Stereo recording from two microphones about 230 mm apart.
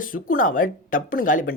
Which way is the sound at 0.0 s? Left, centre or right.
Left.